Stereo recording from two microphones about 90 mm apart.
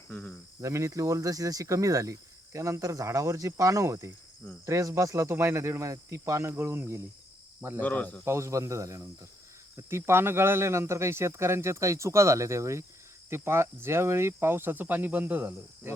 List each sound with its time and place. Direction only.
0.1 s speech: 15° left (ahead or behind)
0.6 s speech: 35° right (ahead or behind)
7.8 s speech: 20° left (ahead or behind)
8.2 s speech: 30° right (ahead or behind)